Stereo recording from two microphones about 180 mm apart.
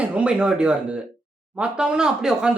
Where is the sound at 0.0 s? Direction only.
5° right (ahead or behind).